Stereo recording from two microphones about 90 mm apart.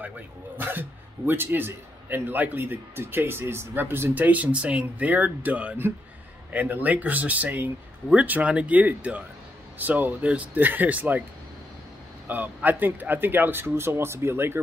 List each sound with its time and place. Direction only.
0.6 s a man's voice: 20° right (ahead or behind)
12.3 s a man's voice: 20° right (ahead or behind)